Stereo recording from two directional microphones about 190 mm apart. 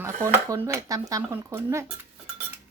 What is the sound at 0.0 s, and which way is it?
Speech, 15° right (ahead or behind).